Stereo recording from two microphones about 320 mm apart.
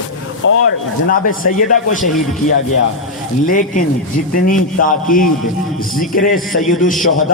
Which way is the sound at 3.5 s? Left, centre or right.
Left.